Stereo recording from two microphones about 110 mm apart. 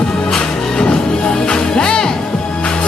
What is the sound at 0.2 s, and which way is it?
Music, 5° left (ahead or behind).